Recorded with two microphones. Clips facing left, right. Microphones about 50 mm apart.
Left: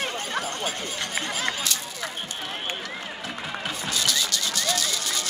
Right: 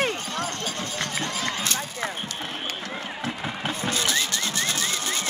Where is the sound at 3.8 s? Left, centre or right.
Right.